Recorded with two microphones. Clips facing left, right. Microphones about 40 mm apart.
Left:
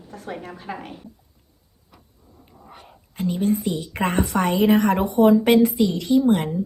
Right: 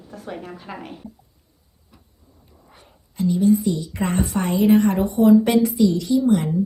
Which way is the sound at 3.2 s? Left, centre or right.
Left.